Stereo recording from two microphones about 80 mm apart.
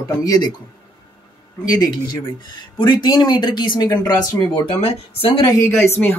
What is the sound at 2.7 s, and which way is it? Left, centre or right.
Speech, left.